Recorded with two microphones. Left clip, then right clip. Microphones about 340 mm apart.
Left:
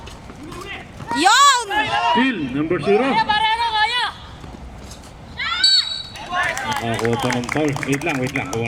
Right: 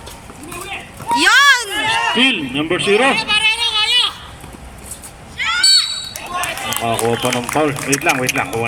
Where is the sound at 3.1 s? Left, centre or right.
Left.